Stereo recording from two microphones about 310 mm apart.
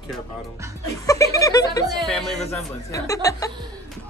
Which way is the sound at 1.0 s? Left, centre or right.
Centre.